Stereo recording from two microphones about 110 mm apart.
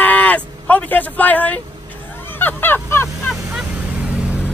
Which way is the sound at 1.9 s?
20° left (ahead or behind).